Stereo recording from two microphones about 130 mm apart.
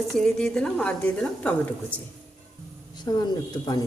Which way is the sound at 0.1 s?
5° left (ahead or behind).